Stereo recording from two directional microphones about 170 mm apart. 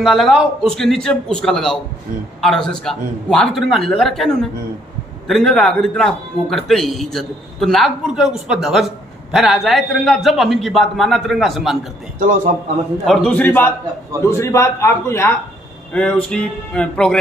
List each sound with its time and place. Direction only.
0.0 s a man's voice: centre (ahead or behind)
12.2 s a man's voice: 50° right (ahead or behind)
13.0 s a man's voice: 5° left (ahead or behind)